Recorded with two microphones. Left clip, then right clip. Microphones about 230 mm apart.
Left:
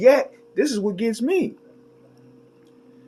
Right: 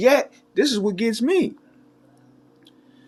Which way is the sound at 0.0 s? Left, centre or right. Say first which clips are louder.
Left 2 dB; right.